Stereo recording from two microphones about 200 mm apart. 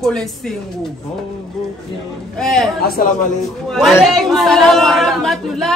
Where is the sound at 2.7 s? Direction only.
50° left (ahead or behind).